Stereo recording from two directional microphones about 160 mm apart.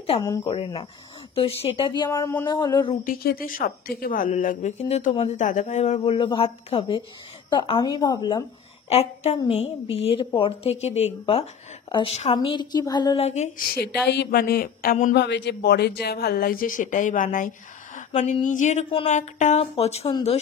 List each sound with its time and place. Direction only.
0.2 s speech: 25° left (ahead or behind)
0.5 s a woman's voice: 35° left (ahead or behind)
2.0 s speech: 15° left (ahead or behind)
2.4 s speech: 25° left (ahead or behind)
3.0 s speech: 65° left (ahead or behind); by 8.5 s 25° left (ahead or behind)
8.8 s a woman's voice: 40° left (ahead or behind); by 13.2 s 25° left (ahead or behind)
13.2 s speech: 45° left (ahead or behind)
14.0 s speech: 90° left; by 15.1 s 55° left (ahead or behind)
15.1 s speech: 90° left; by 20.1 s 40° left (ahead or behind)